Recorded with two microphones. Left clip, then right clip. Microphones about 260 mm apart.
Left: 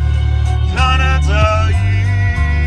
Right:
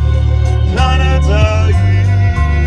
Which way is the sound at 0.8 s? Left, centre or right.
Centre.